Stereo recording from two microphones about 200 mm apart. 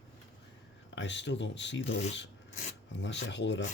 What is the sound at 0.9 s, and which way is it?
Speech, 65° left (ahead or behind).